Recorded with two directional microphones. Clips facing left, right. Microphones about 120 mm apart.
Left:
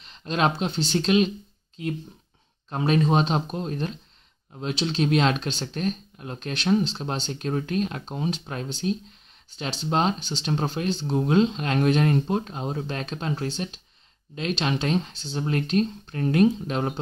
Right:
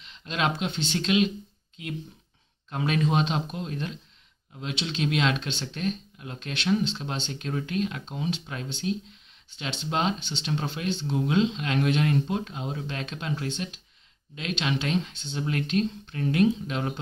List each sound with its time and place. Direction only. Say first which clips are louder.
0.0 s speech: left 4 dB; 40° left (ahead or behind)